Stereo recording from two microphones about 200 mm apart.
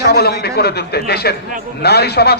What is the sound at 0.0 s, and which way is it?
A man's voice, 50° left (ahead or behind).